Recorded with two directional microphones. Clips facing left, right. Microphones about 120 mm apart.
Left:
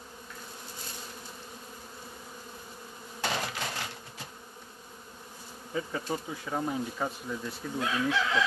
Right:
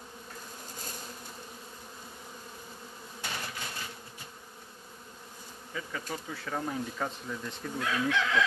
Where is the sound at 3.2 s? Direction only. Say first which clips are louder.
Left 7 dB; 90° left.